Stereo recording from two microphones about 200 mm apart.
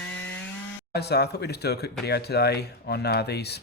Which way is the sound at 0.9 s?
55° left (ahead or behind).